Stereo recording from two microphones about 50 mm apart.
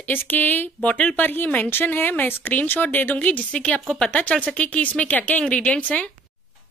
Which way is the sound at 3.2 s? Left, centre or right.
Left.